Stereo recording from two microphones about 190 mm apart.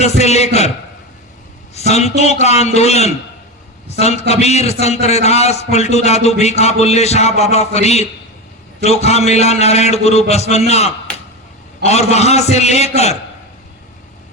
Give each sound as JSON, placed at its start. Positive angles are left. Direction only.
{"t": 0.0, "sound": "a man's voice", "side_deg": 35}
{"t": 1.7, "sound": "a man's voice", "side_deg": 35}